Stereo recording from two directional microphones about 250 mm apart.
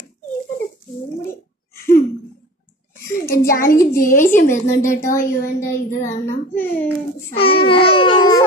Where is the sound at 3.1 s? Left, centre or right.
Left.